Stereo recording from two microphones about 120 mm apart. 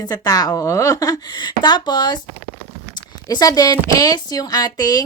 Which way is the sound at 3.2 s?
30° left (ahead or behind).